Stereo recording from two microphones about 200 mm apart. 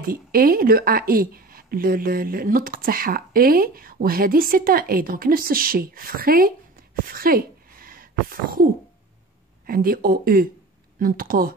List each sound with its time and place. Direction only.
0.0 s a woman's voice: 45° right (ahead or behind)
7.1 s a sound: 45° right (ahead or behind)
9.7 s a woman's voice: 45° right (ahead or behind)